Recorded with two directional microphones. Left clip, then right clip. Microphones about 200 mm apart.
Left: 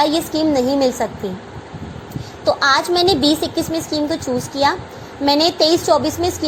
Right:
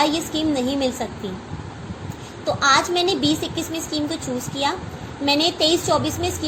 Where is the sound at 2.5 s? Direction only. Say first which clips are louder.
Left 3 dB; 45° left (ahead or behind).